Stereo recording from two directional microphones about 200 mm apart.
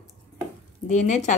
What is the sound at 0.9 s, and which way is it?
Speech, 35° left (ahead or behind).